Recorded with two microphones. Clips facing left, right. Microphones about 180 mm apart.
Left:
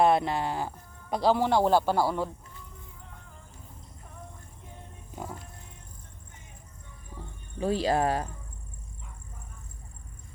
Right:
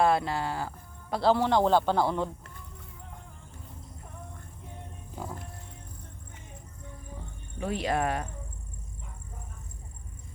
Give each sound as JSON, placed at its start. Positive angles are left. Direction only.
{"t": 0.0, "sound": "speech", "side_deg": 20}
{"t": 7.6, "sound": "speech", "side_deg": 30}